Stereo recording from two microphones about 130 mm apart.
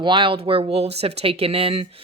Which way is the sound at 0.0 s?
40° right (ahead or behind).